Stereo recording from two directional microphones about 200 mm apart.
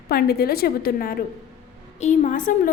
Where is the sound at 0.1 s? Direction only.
50° left (ahead or behind).